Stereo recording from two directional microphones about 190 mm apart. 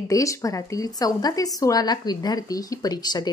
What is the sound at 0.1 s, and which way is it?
A woman's voice, 15° left (ahead or behind).